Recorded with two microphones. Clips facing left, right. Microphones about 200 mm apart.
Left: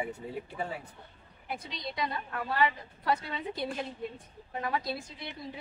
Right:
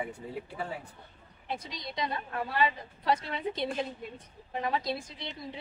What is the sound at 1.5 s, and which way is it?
A woman's voice, 20° right (ahead or behind).